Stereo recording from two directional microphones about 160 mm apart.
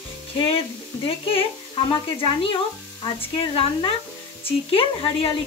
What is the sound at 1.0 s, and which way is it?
Speech, 35° left (ahead or behind).